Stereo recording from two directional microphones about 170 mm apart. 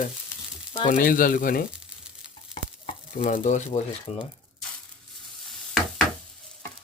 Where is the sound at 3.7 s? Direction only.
30° left (ahead or behind).